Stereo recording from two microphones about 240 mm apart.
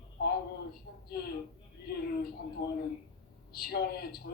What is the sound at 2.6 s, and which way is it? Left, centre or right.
A woman's voice, left.